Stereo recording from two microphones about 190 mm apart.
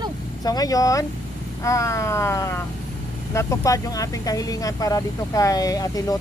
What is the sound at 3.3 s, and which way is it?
Speech, 15° left (ahead or behind).